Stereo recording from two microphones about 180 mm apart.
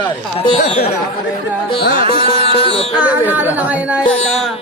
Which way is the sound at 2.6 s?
30° left (ahead or behind).